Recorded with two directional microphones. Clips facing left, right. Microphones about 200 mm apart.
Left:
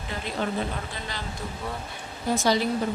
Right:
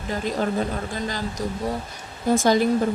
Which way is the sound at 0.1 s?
45° right (ahead or behind).